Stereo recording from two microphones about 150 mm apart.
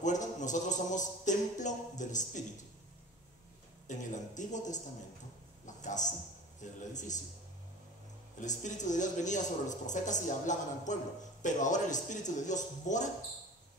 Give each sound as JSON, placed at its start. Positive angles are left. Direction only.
{"t": 0.0, "sound": "a sound", "side_deg": 55}
{"t": 3.8, "sound": "a man's voice", "side_deg": 55}
{"t": 8.4, "sound": "speech", "side_deg": 55}